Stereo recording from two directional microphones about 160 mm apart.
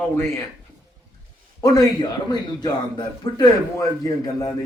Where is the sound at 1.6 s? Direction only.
20° left (ahead or behind).